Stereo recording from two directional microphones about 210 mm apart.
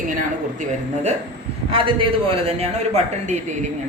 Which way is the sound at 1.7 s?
25° right (ahead or behind).